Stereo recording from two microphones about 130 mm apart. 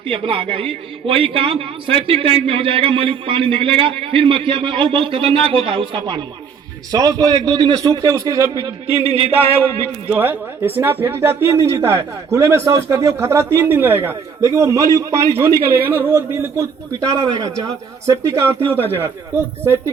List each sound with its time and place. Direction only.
0.0 s a man's voice: 45° right (ahead or behind)
6.9 s speech: 30° right (ahead or behind)
7.5 s a man's voice: 35° right (ahead or behind)
9.0 s a man's voice: 50° right (ahead or behind)
10.1 s a man's voice: 15° right (ahead or behind)